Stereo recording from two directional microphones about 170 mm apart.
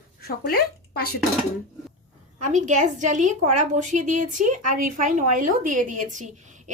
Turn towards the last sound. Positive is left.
turn(degrees=-45)  # may be behind; listen again after turning